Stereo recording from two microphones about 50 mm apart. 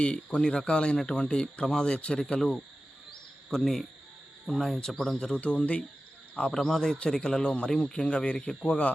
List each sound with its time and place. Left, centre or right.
0.0 s speech: centre
3.5 s speech: centre
5.4 s speech: left
6.5 s speech: centre